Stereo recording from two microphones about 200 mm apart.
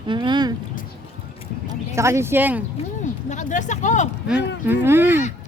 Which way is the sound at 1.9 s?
15° right (ahead or behind).